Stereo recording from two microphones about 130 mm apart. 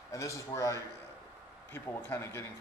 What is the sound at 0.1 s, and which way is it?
A man's voice, 25° left (ahead or behind).